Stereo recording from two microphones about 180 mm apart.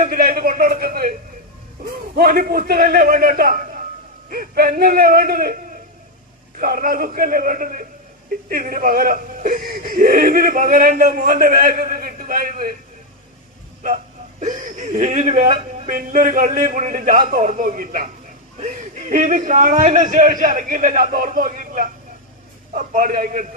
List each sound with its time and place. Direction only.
0.0 s a sound: 50° right (ahead or behind)
2.1 s speech: 55° right (ahead or behind)
6.6 s speech: 50° right (ahead or behind)
14.4 s speech: 45° right (ahead or behind)